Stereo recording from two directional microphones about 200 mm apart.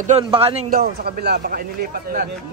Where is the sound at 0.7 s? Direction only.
45° right (ahead or behind).